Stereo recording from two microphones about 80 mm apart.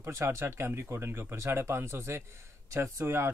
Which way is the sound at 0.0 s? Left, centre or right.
Right.